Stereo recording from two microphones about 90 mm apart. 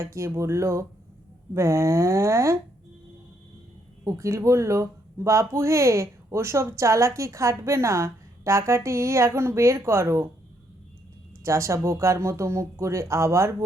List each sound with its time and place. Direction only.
0.0 s speech: 30° right (ahead or behind)
4.0 s speech: 35° right (ahead or behind)
11.4 s speech: 30° right (ahead or behind)